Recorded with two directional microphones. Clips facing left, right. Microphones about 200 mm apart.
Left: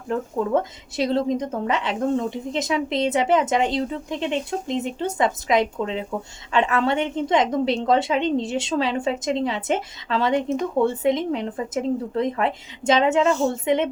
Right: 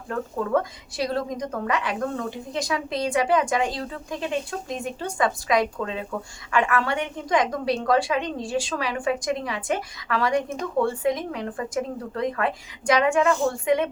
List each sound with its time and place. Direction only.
0.1 s a woman's voice: 25° left (ahead or behind)